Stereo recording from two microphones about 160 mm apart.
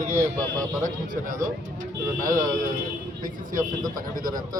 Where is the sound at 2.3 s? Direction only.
60° right (ahead or behind).